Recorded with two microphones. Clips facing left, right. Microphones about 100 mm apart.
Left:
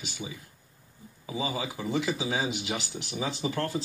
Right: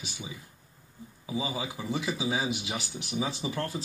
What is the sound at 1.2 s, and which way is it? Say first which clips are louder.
Speech: left 1 dB; 15° right (ahead or behind).